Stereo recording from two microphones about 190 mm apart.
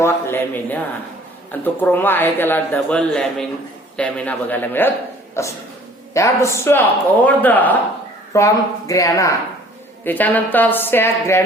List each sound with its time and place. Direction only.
0.0 s speech: 10° left (ahead or behind)
5.3 s a sound: 15° left (ahead or behind)
6.1 s speech: 15° left (ahead or behind)